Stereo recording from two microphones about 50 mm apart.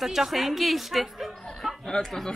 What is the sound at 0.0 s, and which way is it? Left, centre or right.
Speech, centre.